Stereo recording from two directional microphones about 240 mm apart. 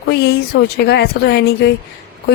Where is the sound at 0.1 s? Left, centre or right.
Left.